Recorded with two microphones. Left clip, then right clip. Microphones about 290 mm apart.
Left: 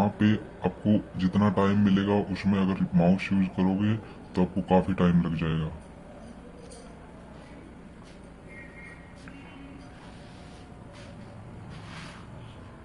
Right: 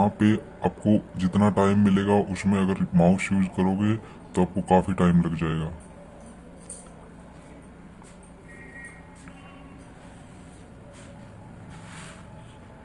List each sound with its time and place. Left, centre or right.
0.0 s speech: right